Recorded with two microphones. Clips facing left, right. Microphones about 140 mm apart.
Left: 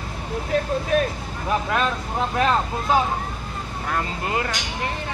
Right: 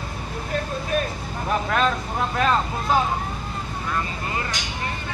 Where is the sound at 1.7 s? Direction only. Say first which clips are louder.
Right 1 dB; 15° left (ahead or behind).